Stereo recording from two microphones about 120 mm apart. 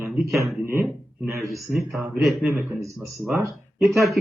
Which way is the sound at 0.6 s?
20° right (ahead or behind).